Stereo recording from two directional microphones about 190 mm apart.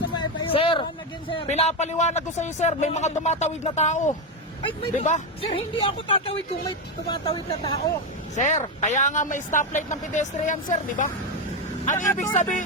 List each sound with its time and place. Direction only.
0.2 s a sound: 30° left (ahead or behind)
1.3 s speech: 30° left (ahead or behind)
4.6 s speech: 25° left (ahead or behind)
8.4 s speech: 40° left (ahead or behind)